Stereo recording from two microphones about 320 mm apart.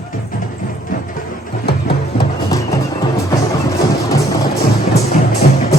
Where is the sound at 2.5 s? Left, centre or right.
Centre.